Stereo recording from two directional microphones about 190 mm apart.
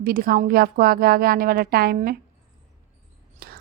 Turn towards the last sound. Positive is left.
turn(degrees=-50)  # may be behind; listen again after turning